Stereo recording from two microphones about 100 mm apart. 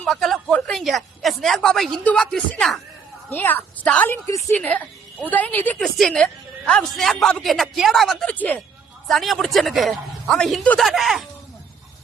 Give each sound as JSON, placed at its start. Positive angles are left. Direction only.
{"t": 0.0, "sound": "a man's voice", "side_deg": 0}
{"t": 3.2, "sound": "a woman's voice", "side_deg": 20}
{"t": 4.3, "sound": "a woman's voice", "side_deg": 30}
{"t": 4.5, "sound": "a woman's voice", "side_deg": 15}
{"t": 5.8, "sound": "a man's voice", "side_deg": 5}
{"t": 8.3, "sound": "a woman's voice", "side_deg": 15}
{"t": 9.0, "sound": "a man's voice", "side_deg": 0}